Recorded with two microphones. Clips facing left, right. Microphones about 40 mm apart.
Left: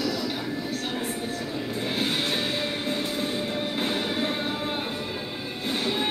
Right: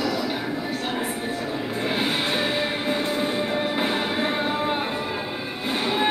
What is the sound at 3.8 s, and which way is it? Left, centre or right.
Music, centre.